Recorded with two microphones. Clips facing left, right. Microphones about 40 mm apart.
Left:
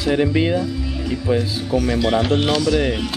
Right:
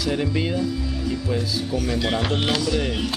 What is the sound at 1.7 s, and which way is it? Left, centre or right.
Speech, centre.